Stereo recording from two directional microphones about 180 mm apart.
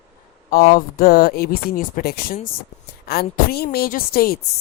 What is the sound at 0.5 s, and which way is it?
A man's voice, 55° left (ahead or behind).